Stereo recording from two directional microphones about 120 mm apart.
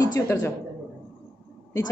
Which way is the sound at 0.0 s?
25° left (ahead or behind).